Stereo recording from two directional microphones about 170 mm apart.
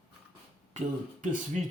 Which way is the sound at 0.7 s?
45° right (ahead or behind).